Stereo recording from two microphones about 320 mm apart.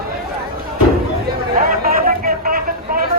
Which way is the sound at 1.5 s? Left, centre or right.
Right.